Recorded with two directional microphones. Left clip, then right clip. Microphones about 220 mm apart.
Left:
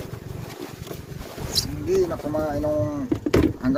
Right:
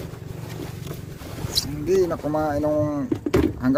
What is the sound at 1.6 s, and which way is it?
Speech, 40° right (ahead or behind).